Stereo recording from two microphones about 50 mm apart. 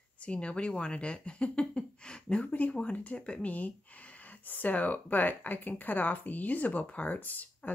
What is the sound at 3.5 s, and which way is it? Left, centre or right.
Speech, left.